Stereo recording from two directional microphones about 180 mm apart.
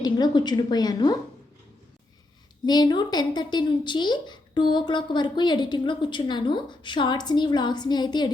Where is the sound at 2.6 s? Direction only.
25° left (ahead or behind).